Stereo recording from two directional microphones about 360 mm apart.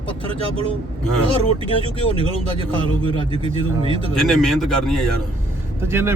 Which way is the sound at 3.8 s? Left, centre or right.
Centre.